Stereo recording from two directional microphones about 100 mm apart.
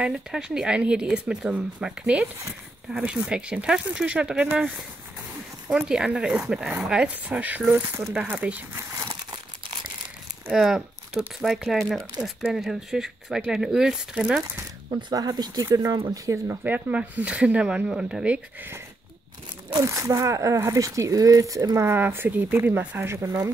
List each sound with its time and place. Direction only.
0.0 s speech: 5° right (ahead or behind)
5.7 s speech: 10° right (ahead or behind)
10.5 s speech: 5° right (ahead or behind)
14.9 s speech: 50° right (ahead or behind)
16.6 s speech: 15° right (ahead or behind)
19.7 s speech: 30° right (ahead or behind)